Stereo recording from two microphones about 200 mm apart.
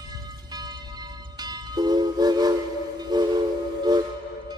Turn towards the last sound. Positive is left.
turn(degrees=-20)  # may be behind; listen again after turning